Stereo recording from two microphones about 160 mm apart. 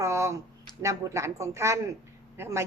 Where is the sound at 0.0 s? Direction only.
20° right (ahead or behind).